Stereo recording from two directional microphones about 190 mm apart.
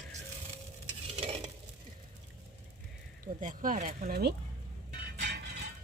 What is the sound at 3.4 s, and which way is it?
Speech, 45° right (ahead or behind).